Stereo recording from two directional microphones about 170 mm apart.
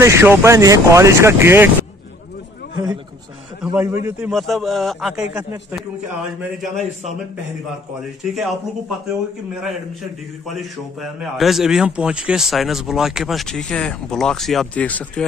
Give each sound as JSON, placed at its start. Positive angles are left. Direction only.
{"t": 0.0, "sound": "speech", "side_deg": -15}
{"t": 3.7, "sound": "speech", "side_deg": -10}
{"t": 4.3, "sound": "a man's voice", "side_deg": 0}
{"t": 6.6, "sound": "a man's voice", "side_deg": 0}
{"t": 8.2, "sound": "a man's voice", "side_deg": 0}
{"t": 10.4, "sound": "a man's voice", "side_deg": 0}